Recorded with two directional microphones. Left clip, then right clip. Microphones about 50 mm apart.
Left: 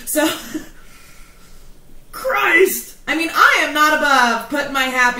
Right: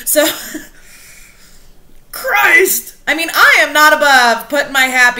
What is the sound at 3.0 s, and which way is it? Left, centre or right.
A woman's voice, right.